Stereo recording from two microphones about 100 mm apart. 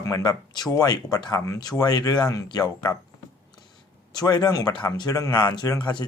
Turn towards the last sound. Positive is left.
turn(degrees=50)  # may be behind; listen again after turning